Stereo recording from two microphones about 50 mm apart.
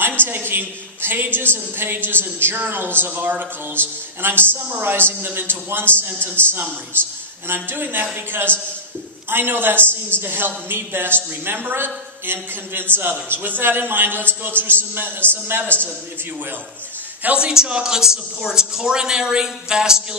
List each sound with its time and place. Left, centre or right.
0.0 s a woman's voice: right
17.4 s speech: centre